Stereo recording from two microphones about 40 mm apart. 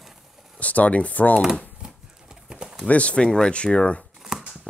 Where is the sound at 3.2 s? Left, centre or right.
Centre.